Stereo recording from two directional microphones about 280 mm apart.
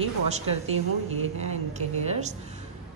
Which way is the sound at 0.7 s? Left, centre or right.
Right.